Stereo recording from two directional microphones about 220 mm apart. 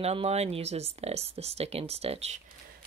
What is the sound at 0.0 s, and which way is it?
Speech, 30° right (ahead or behind).